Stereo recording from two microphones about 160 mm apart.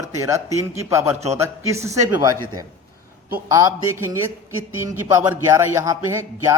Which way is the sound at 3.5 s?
20° right (ahead or behind).